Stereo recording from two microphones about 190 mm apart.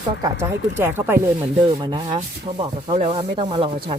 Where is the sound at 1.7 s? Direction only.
25° right (ahead or behind).